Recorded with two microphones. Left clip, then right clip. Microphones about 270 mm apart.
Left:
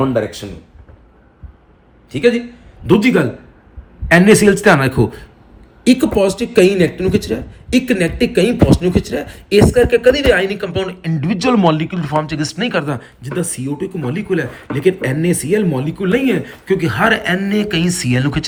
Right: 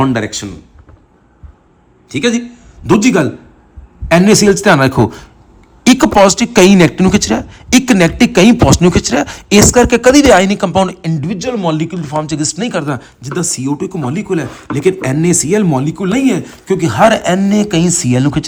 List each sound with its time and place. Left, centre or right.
0.2 s speech: right
2.0 s a man's voice: right; by 11.3 s centre
11.3 s speech: centre
11.6 s speech: centre